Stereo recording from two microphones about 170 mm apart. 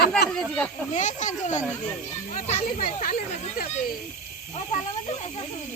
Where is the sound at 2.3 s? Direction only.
50° left (ahead or behind).